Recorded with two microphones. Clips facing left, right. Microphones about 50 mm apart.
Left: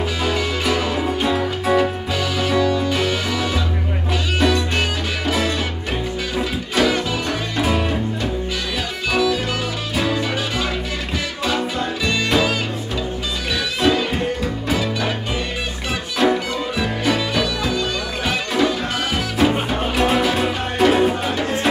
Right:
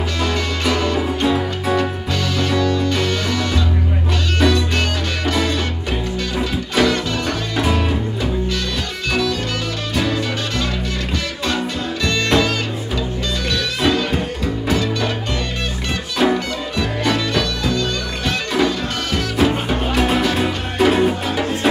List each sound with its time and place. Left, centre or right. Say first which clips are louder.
0.2 s music: right 2 dB; centre
13.7 s music: left 1 dB; centre
16.2 s music: even; centre